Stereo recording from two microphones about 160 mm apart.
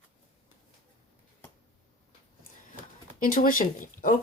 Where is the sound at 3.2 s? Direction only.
60° left (ahead or behind).